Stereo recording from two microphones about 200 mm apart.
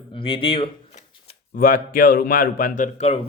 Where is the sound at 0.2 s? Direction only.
25° left (ahead or behind).